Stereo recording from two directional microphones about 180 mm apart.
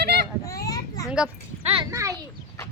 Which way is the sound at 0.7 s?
20° left (ahead or behind).